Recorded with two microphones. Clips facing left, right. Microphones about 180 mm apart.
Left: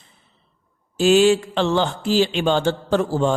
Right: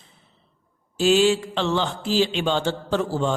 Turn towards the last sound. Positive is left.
turn(degrees=45)  # may be behind; listen again after turning